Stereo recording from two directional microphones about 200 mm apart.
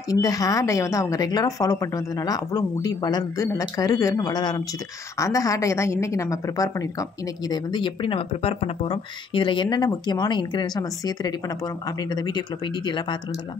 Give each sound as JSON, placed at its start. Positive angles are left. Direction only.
{"t": 0.1, "sound": "a woman's voice", "side_deg": 15}